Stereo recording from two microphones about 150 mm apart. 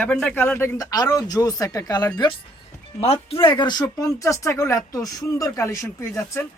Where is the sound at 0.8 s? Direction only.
25° left (ahead or behind).